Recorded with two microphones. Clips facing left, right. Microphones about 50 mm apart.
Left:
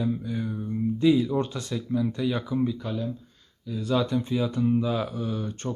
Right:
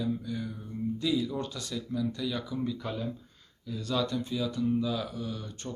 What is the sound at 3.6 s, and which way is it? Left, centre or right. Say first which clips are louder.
Speech: left 5 dB; centre.